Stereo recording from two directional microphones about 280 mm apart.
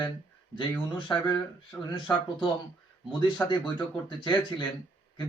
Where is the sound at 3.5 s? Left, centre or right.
Centre.